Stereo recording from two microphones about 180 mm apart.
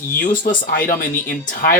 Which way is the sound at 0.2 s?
50° left (ahead or behind).